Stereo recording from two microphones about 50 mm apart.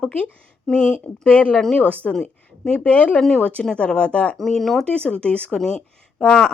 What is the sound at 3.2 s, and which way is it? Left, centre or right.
Speech, centre.